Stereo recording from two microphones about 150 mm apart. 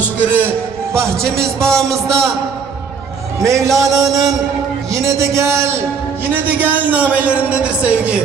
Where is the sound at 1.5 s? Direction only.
5° left (ahead or behind).